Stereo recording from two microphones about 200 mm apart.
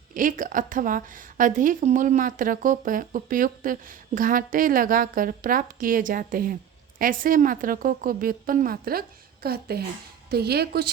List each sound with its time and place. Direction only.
0.1 s a woman's voice: 40° right (ahead or behind)